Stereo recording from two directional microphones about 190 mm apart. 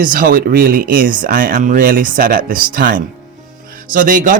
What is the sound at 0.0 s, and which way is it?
A man's voice, 45° right (ahead or behind).